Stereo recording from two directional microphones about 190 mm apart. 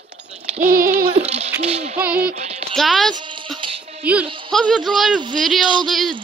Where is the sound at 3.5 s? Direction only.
30° right (ahead or behind).